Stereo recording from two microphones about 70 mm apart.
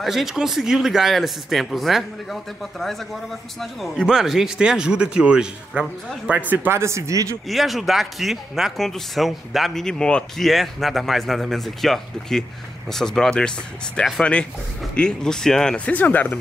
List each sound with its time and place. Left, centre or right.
0.0 s speech: centre
3.9 s speech: centre; by 6.7 s right
6.7 s speech: right
7.4 s speech: centre; by 16.3 s left